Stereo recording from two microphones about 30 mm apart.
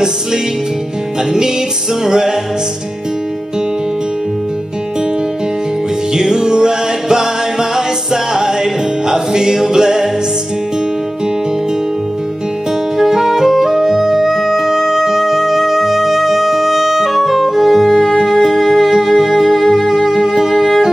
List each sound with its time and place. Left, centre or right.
2.0 s music: centre
6.1 s music: right
12.9 s music: centre
18.6 s music: centre